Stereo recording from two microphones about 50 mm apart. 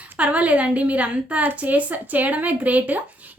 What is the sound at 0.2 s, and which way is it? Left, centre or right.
A woman's voice, right.